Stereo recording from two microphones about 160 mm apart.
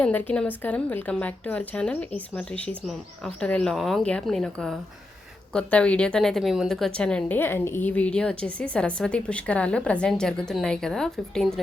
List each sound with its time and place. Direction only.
0.0 s a woman's voice: 10° left (ahead or behind)